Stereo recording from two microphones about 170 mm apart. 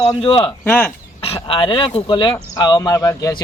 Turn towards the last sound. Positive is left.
turn(degrees=20)  # may be behind; listen again after turning